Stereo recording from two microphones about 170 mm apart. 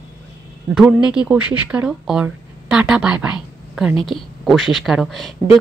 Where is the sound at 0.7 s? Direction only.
5° right (ahead or behind).